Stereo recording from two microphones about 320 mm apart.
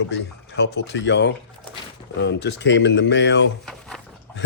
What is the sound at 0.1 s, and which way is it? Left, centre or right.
Speech, left.